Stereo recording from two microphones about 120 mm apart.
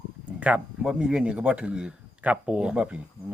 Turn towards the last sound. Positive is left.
turn(degrees=-10)  # may be behind; listen again after turning